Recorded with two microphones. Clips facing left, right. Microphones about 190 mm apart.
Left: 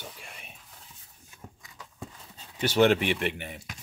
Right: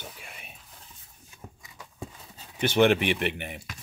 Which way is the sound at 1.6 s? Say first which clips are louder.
Right 3 dB; 5° right (ahead or behind).